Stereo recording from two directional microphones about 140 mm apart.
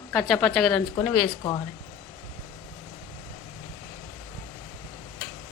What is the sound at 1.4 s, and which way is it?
Speech, 35° left (ahead or behind).